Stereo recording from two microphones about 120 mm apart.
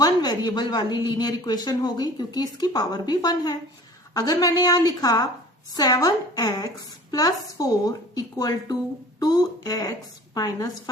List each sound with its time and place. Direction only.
0.0 s a woman's voice: 35° left (ahead or behind)